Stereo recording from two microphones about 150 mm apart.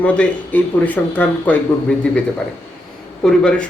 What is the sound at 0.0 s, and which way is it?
Speech, 10° left (ahead or behind).